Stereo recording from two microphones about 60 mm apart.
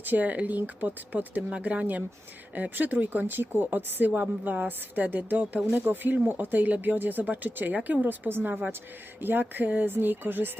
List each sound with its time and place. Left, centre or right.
0.0 s speech: right